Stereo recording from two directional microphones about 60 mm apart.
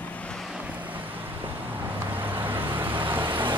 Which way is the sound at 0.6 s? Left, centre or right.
Right.